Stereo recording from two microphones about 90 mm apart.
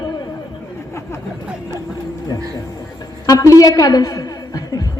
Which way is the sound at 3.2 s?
40° left (ahead or behind).